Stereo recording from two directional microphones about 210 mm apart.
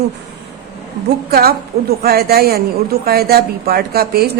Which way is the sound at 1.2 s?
45° right (ahead or behind).